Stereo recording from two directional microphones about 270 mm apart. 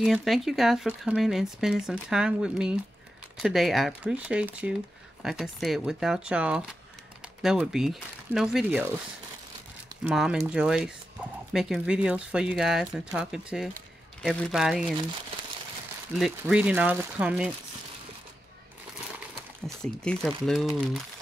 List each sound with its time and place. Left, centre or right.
0.0 s speech: centre
9.8 s speech: centre
16.2 s speech: centre
19.8 s speech: centre